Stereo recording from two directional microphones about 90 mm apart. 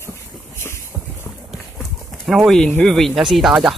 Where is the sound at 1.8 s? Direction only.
5° right (ahead or behind).